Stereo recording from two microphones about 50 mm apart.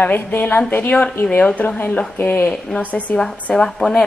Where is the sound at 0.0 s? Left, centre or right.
Left.